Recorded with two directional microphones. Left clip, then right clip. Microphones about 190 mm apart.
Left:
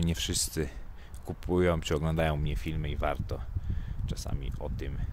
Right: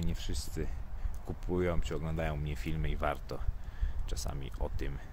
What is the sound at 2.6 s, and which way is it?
Speech, 15° left (ahead or behind).